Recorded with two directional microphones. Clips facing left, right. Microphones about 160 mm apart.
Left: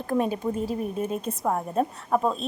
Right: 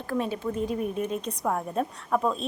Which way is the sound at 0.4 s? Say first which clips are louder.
Left 1 dB; 15° left (ahead or behind).